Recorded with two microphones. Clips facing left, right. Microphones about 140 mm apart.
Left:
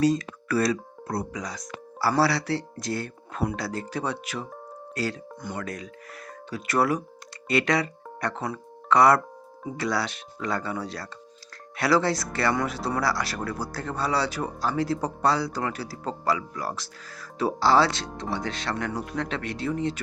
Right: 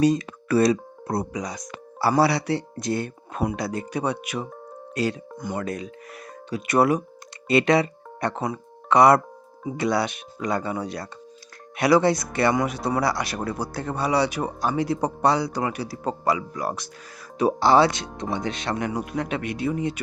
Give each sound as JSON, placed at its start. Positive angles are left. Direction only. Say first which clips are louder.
{"t": 0.0, "sound": "speech", "louder": "right 2 dB", "side_deg": -20}